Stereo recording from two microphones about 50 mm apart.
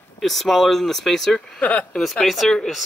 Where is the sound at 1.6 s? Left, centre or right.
Left.